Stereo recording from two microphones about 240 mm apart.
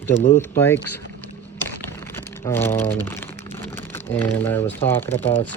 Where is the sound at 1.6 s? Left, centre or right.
Centre.